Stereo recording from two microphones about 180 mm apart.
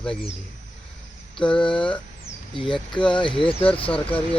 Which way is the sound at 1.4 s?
5° left (ahead or behind).